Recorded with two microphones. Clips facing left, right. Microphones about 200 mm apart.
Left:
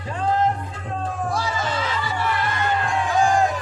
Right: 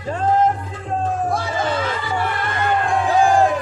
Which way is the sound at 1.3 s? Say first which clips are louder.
Right 4 dB; 55° right (ahead or behind).